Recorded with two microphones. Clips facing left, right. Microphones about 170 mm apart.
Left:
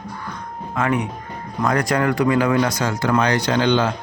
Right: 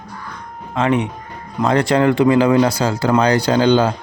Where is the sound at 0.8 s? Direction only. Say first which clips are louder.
Right 4 dB; 25° right (ahead or behind).